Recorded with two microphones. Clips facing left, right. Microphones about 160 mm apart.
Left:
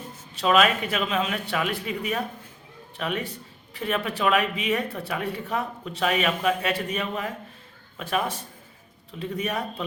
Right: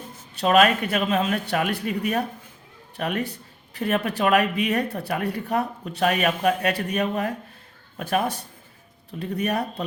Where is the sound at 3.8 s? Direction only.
45° right (ahead or behind); by 5.6 s 65° right (ahead or behind).